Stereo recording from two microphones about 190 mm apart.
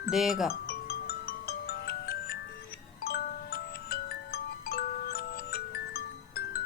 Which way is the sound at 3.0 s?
55° left (ahead or behind).